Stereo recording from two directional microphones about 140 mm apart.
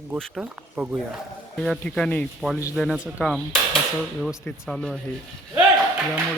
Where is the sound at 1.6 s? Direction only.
5° left (ahead or behind).